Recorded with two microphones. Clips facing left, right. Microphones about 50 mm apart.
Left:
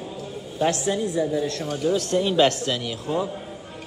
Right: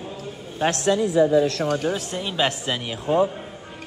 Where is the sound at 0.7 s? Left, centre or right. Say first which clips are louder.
Right 4 dB; right.